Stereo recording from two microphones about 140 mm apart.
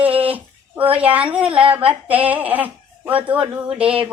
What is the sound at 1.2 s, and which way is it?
A woman's voice, 10° right (ahead or behind).